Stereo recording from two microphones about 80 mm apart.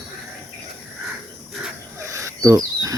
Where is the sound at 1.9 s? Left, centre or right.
Right.